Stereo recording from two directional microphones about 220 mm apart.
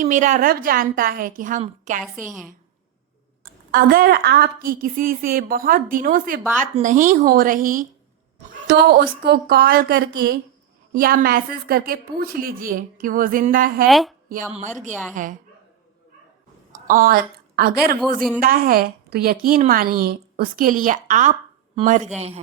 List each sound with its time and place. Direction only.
0.0 s a woman's voice: 35° right (ahead or behind)
3.4 s a woman's voice: 40° right (ahead or behind)
13.8 s a woman's voice: centre (ahead or behind)
15.1 s a woman's voice: 35° right (ahead or behind)
16.8 s a woman's voice: 40° right (ahead or behind)